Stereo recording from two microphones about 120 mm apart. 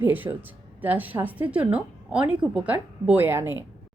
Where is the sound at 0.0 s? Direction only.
15° right (ahead or behind).